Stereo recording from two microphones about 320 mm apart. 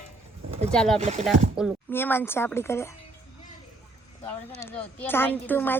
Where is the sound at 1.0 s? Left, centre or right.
Centre.